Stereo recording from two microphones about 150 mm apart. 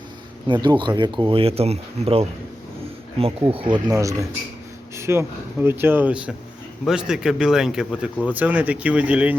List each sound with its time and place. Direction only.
0.4 s speech: 30° right (ahead or behind)
3.8 s speech: 20° right (ahead or behind)